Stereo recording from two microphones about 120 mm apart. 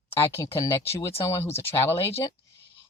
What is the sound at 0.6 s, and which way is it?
Speech, 20° left (ahead or behind).